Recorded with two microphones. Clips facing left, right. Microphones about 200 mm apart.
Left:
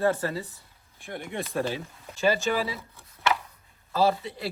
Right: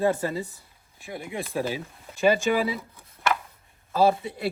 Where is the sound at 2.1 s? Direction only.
15° right (ahead or behind).